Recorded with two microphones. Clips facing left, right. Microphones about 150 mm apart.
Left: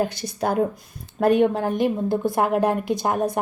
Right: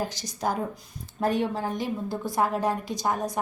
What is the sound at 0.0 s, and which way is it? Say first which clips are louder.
A woman's voice: left 6 dB; 60° left (ahead or behind).